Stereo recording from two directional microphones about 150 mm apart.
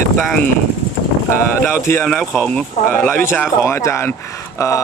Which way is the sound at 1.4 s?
15° left (ahead or behind).